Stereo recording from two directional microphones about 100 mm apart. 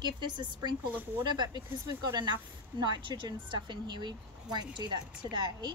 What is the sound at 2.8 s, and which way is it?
A woman's voice, 50° right (ahead or behind).